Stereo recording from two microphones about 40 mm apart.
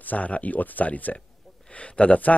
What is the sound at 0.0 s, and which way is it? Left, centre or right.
Speech, left.